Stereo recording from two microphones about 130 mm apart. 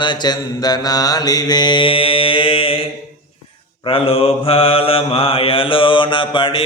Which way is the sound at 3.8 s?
45° left (ahead or behind).